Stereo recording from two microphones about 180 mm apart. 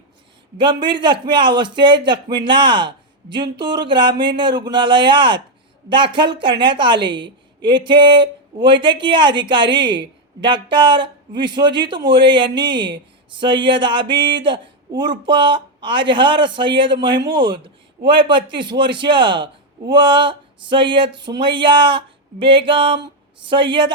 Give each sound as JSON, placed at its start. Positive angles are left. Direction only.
{"t": 0.6, "sound": "a man's voice", "side_deg": -25}
{"t": 21.2, "sound": "a sound", "side_deg": -70}
{"t": 21.4, "sound": "a man's voice", "side_deg": -25}